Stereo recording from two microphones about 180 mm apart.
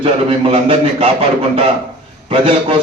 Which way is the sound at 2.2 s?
30° right (ahead or behind).